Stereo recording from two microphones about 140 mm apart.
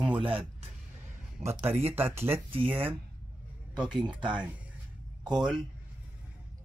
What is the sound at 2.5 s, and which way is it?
Speech, 40° right (ahead or behind).